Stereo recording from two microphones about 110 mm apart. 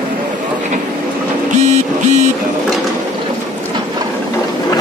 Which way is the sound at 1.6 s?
90° right.